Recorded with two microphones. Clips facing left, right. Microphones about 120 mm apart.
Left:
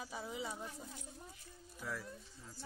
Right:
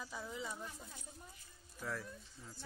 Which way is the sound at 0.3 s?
15° left (ahead or behind).